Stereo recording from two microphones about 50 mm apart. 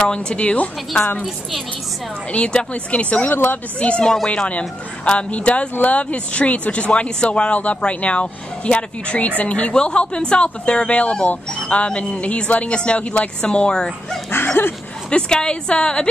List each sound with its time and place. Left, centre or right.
0.0 s speech: centre
2.3 s speech: left
3.3 s speech: left
4.0 s speech: centre
4.5 s speech: left
14.3 s dog: left
15.0 s speech: centre